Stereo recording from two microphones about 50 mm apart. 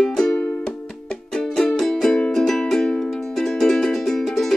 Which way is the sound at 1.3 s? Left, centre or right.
Centre.